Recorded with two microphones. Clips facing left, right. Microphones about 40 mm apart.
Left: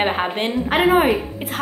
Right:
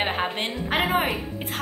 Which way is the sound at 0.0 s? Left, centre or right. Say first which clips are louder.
Left 5 dB; centre.